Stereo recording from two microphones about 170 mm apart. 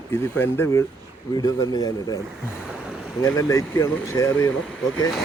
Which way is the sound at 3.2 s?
20° left (ahead or behind).